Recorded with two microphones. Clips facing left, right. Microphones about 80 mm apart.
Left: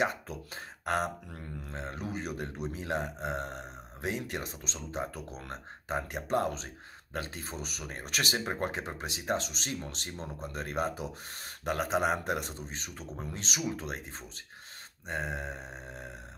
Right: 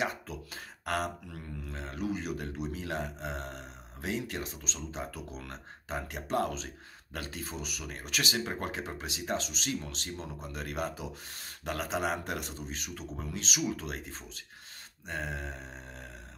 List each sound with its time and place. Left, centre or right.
0.0 s speech: left